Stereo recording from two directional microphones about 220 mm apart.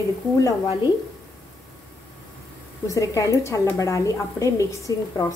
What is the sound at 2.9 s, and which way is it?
A woman's voice, 15° left (ahead or behind).